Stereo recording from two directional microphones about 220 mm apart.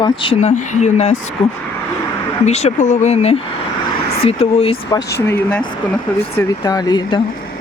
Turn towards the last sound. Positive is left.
turn(degrees=20)  # may be behind; listen again after turning